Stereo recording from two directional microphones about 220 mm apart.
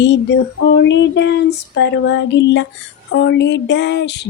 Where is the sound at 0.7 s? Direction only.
55° left (ahead or behind).